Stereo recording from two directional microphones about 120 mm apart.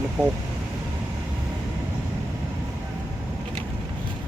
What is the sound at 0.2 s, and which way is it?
Speech, 10° right (ahead or behind).